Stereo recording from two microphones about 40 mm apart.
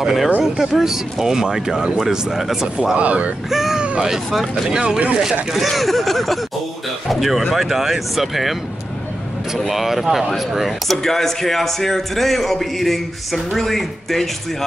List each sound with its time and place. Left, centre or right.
0.0 s speech: centre
3.0 s speech: right
3.4 s a man's voice: centre
4.6 s speech: right
5.5 s a man's voice: centre
9.6 s a man's voice: centre
11.1 s a man's voice: centre